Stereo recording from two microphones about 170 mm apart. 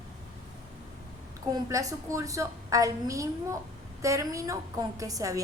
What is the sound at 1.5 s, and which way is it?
A woman's voice, 20° right (ahead or behind).